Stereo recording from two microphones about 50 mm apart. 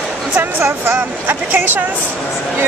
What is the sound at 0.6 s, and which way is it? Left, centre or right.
Speech, right.